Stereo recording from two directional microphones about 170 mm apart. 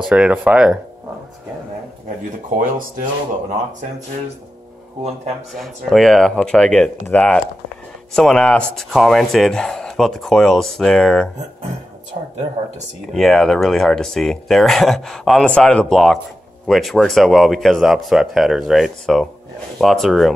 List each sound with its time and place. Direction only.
0.0 s speech: 5° right (ahead or behind)
2.6 s speech: 55° right (ahead or behind)
5.5 s speech: centre (ahead or behind)
13.1 s speech: centre (ahead or behind)